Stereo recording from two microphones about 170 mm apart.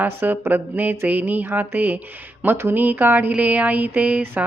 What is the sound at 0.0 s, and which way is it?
Speech, 10° right (ahead or behind).